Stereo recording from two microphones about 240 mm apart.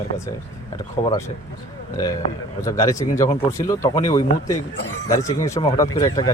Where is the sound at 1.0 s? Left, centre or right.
Left.